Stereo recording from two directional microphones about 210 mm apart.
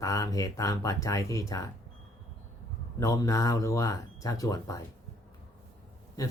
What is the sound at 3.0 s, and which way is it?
Speech, 15° left (ahead or behind).